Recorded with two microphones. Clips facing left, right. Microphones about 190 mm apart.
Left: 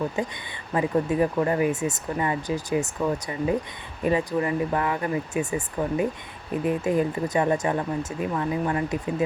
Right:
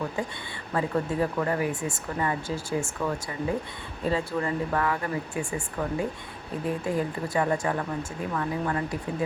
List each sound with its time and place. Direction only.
0.2 s speech: 20° left (ahead or behind)